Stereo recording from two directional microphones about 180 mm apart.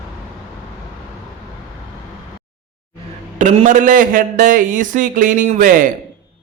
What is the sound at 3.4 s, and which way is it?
A man's voice, 45° right (ahead or behind).